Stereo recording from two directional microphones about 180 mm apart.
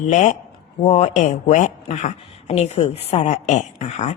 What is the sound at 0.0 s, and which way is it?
Speech, 40° left (ahead or behind).